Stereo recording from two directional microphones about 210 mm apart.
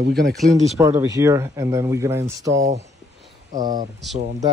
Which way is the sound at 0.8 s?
15° right (ahead or behind).